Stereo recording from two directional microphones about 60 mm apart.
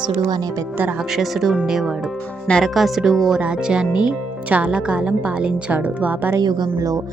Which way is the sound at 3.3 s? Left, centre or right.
Centre.